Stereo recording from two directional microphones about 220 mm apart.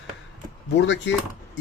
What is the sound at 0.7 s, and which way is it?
Speech, 55° left (ahead or behind).